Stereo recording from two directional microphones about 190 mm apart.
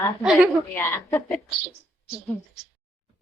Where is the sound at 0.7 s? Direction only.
10° left (ahead or behind).